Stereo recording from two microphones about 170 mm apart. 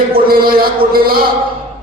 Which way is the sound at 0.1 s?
60° right (ahead or behind).